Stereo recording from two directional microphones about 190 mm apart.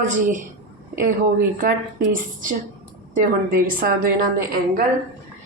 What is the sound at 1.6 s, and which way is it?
A woman's voice, 50° right (ahead or behind).